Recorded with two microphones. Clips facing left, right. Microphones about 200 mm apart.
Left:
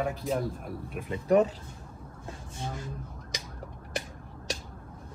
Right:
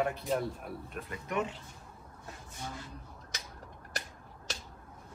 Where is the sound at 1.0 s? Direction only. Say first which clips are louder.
Left 12 dB; 30° left (ahead or behind).